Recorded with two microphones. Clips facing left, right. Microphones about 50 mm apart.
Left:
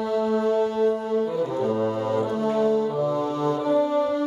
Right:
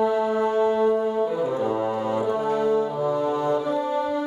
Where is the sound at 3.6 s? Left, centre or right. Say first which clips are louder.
Left 3 dB; centre.